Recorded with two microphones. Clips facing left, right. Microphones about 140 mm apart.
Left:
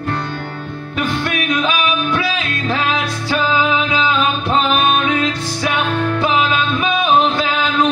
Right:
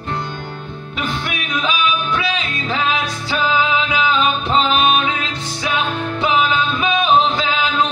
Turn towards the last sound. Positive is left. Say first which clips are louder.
# left 2 dB
turn(degrees=0)  # may be behind; listen again after turning